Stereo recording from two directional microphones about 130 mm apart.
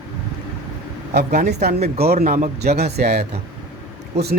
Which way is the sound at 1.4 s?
60° right (ahead or behind).